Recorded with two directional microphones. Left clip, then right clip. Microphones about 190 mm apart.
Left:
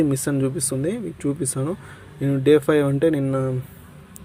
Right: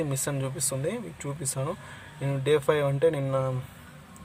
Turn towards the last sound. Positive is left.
turn(degrees=20)  # may be behind; listen again after turning